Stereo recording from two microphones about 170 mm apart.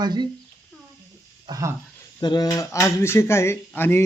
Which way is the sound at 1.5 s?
20° right (ahead or behind).